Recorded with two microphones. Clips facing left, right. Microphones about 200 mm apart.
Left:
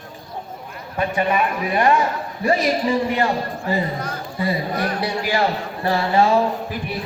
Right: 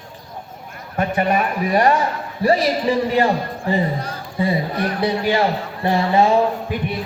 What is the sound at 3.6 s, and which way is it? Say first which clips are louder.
A man's voice: right 3 dB; 30° right (ahead or behind).